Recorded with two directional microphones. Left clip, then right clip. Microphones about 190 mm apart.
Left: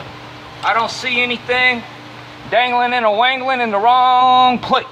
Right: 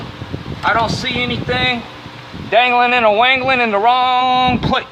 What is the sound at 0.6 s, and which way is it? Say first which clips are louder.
Speech: right 1 dB; 10° right (ahead or behind).